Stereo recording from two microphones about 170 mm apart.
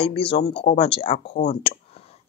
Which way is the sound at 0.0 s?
30° left (ahead or behind).